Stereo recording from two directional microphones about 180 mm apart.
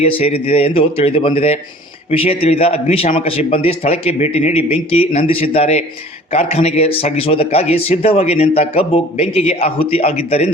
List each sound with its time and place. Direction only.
0.0 s a man's voice: 35° left (ahead or behind)